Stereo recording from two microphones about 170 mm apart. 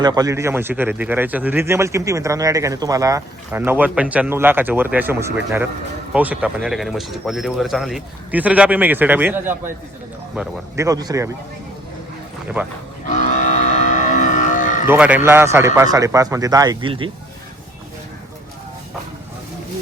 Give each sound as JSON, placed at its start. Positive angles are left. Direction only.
{"t": 0.0, "sound": "a man's voice", "side_deg": -20}
{"t": 10.8, "sound": "speech", "side_deg": -20}
{"t": 13.1, "sound": "vehicle", "side_deg": 45}
{"t": 14.8, "sound": "a man's voice", "side_deg": -10}